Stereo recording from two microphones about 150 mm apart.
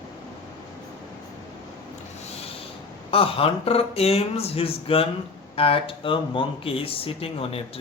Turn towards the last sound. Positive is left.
turn(degrees=40)  # may be behind; listen again after turning